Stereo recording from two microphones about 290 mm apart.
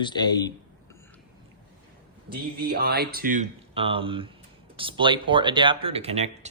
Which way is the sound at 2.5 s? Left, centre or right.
Right.